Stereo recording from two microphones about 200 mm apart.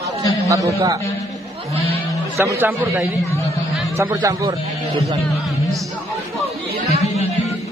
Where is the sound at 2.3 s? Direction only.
15° right (ahead or behind).